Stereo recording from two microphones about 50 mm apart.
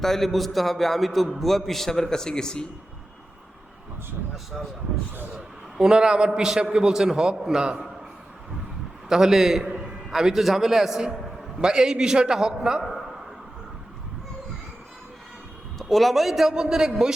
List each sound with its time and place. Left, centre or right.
0.0 s a man's voice: centre
5.7 s a man's voice: centre
9.0 s a man's voice: centre
15.8 s a man's voice: centre